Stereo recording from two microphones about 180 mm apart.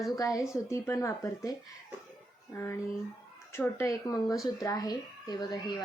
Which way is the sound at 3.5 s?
15° left (ahead or behind).